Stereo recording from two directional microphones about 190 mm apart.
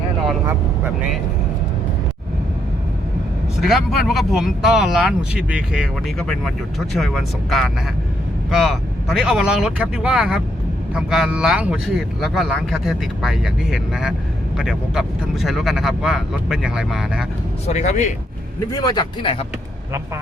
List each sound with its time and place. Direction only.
3.6 s speech: centre (ahead or behind)
17.7 s speech: 35° left (ahead or behind)
18.7 s speech: 20° left (ahead or behind)